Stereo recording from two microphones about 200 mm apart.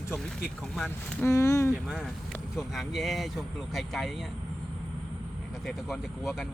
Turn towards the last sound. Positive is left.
turn(degrees=0)  # may be behind; listen again after turning